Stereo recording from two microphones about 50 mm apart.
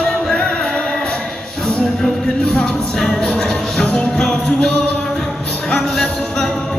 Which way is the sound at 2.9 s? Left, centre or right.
Centre.